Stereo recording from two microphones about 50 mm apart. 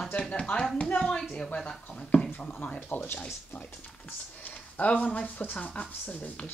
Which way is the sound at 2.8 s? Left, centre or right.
Left.